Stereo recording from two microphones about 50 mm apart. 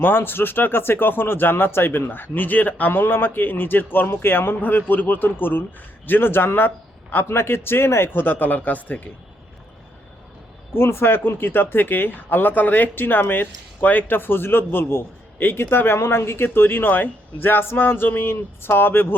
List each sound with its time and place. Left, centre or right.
0.0 s a man's voice: left
7.3 s speech: left
10.8 s speech: left
16.0 s speech: left